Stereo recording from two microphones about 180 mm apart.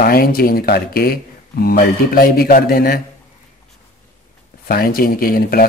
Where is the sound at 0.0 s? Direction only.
55° left (ahead or behind).